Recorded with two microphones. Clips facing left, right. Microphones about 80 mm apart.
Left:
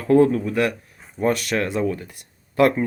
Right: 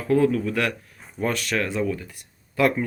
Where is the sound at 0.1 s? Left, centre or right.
Left.